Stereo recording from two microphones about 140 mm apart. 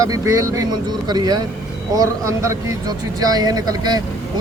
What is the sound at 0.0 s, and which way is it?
Speech, 25° right (ahead or behind).